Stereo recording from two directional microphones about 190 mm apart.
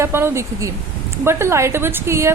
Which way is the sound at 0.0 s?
15° right (ahead or behind).